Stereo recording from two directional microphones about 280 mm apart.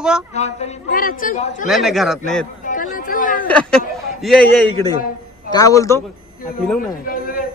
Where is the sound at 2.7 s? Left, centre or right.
Left.